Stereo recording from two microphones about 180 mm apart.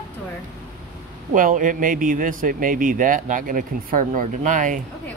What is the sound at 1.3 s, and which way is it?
Speech, 45° right (ahead or behind).